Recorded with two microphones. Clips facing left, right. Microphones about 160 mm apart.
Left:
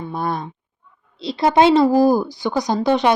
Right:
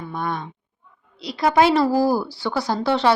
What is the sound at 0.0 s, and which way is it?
Speech, 35° left (ahead or behind).